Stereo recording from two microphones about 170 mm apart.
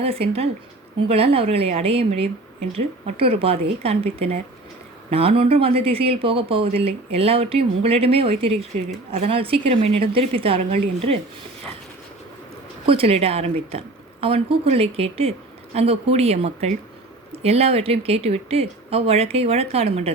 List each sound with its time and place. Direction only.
0.0 s a woman's voice: 35° right (ahead or behind)
12.8 s a woman's voice: 35° right (ahead or behind)